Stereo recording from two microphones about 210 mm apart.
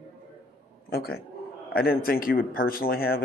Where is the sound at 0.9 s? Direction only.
45° left (ahead or behind).